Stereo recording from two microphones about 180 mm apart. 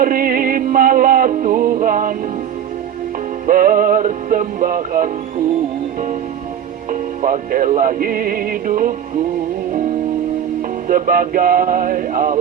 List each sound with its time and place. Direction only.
0.0 s synthetic singing: 50° right (ahead or behind)
3.4 s music: 50° right (ahead or behind)
6.9 s music: 50° right (ahead or behind)
10.8 s music: 50° right (ahead or behind)